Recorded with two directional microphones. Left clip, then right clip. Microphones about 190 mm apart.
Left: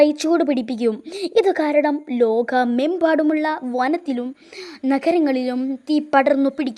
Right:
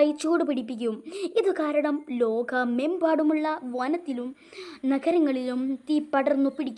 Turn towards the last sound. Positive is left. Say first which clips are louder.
# left 7 dB
turn(degrees=35)  # may be behind; listen again after turning